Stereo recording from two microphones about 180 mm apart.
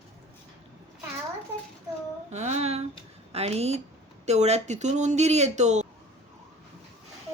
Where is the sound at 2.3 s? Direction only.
40° right (ahead or behind).